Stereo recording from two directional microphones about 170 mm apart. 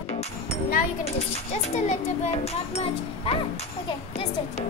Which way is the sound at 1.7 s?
45° left (ahead or behind).